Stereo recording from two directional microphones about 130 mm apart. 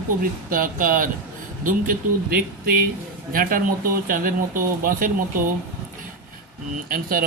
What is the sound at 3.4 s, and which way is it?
Speech, 90° right.